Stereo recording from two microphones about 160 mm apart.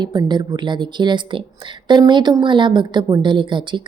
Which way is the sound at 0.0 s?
25° right (ahead or behind).